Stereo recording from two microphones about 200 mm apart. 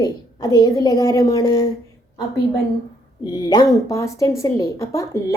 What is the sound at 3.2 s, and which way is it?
A woman's voice, 20° left (ahead or behind).